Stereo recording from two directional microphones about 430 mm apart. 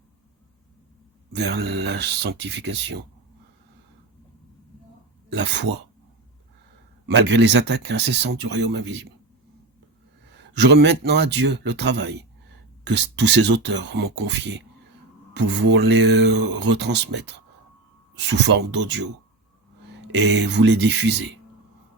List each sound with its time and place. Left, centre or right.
1.3 s speech: right
5.3 s speech: right
7.1 s speech: right
10.5 s speech: right
18.4 s speech: right
20.3 s speech: right